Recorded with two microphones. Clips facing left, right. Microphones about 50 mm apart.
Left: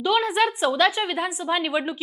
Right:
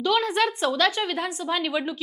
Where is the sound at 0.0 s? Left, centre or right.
Centre.